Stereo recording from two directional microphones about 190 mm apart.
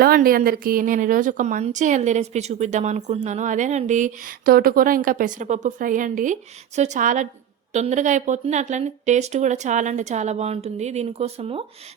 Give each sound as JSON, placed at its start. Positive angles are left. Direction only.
{"t": 0.0, "sound": "a woman's voice", "side_deg": -50}